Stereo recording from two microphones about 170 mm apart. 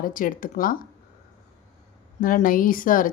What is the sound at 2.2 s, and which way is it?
Speech, 55° left (ahead or behind).